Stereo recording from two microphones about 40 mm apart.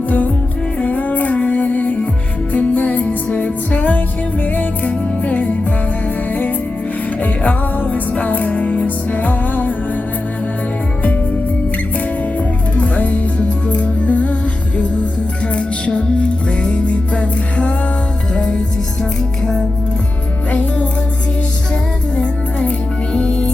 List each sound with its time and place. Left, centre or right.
0.8 s music: left
7.2 s music: left
12.7 s music: left
15.5 s music: left
20.5 s music: left
23.1 s music: left